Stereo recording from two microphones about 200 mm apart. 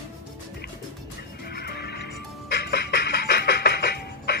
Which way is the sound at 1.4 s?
50° left (ahead or behind).